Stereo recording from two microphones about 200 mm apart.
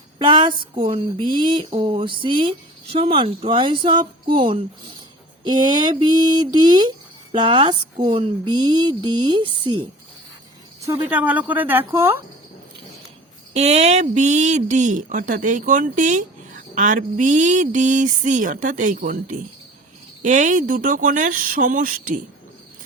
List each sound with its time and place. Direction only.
0.2 s speech: 25° right (ahead or behind)
11.1 s speech: 10° right (ahead or behind)
13.5 s speech: 35° right (ahead or behind)